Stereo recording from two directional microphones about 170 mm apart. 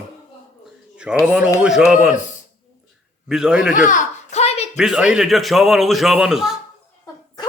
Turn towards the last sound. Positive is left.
turn(degrees=0)  # may be behind; listen again after turning